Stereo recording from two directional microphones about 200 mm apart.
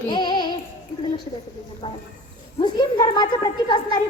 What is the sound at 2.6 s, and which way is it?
A woman's voice, 20° left (ahead or behind).